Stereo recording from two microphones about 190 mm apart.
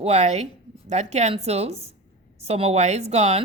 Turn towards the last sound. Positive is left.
turn(degrees=-35)  # may be behind; listen again after turning